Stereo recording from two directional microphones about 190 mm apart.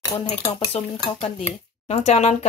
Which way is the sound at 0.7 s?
30° left (ahead or behind).